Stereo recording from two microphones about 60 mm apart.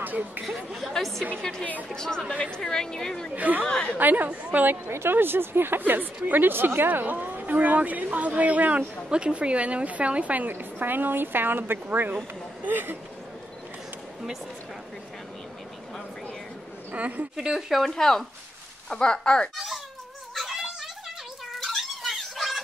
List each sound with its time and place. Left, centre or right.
0.0 s speech: right
0.7 s a woman's voice: centre
3.3 s a woman's voice: right
3.6 s a woman's voice: centre
4.0 s a woman's voice: right
4.6 s a woman's voice: right
16.9 s a woman's voice: right
17.4 s a woman's voice: centre
17.8 s a woman's voice: centre
19.5 s cat: centre
20.3 s music: centre
21.5 s a sound: centre